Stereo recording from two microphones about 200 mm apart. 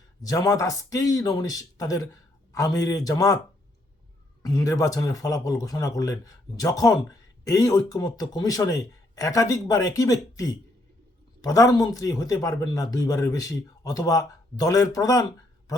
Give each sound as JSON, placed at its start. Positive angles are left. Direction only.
{"t": 0.2, "sound": "speech", "side_deg": 20}
{"t": 4.4, "sound": "speech", "side_deg": 15}